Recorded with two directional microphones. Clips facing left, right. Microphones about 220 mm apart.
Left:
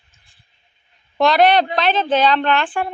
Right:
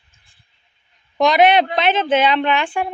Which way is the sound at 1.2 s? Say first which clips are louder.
Even; 20° right (ahead or behind).